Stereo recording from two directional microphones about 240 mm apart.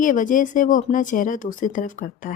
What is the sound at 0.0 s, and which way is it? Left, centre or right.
Speech, left.